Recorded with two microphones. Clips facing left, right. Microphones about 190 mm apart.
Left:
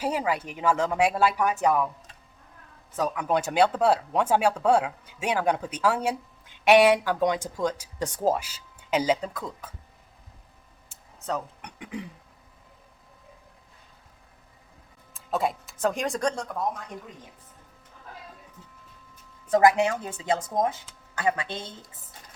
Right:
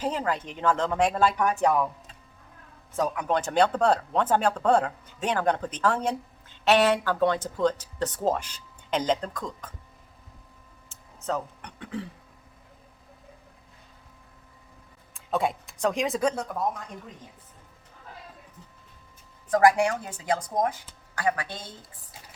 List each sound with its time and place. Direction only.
0.0 s speech: 10° left (ahead or behind)
3.0 s speech: 10° left (ahead or behind)
11.6 s speech: 15° left (ahead or behind)
15.1 s speech: centre (ahead or behind)
19.5 s speech: 20° left (ahead or behind)